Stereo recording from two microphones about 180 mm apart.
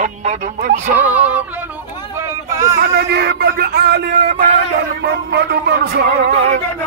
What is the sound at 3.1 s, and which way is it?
Speech, 65° right (ahead or behind).